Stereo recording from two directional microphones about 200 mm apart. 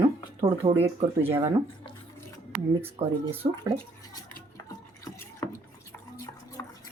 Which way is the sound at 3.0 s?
30° right (ahead or behind).